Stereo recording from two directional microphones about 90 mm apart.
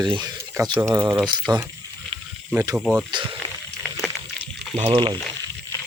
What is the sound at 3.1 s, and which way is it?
Speech, 70° right (ahead or behind).